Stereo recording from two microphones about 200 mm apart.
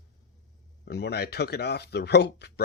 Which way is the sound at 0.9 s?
55° left (ahead or behind).